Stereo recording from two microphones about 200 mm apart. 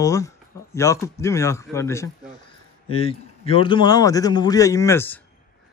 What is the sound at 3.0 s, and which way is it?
A man's voice, 30° left (ahead or behind).